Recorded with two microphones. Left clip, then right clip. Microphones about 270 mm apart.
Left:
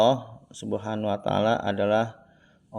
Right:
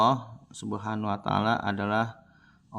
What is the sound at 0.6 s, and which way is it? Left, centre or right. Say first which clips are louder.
Speech: left 4 dB; right.